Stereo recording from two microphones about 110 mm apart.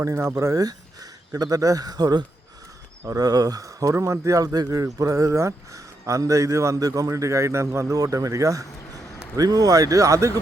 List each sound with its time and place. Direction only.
0.0 s speech: 25° right (ahead or behind)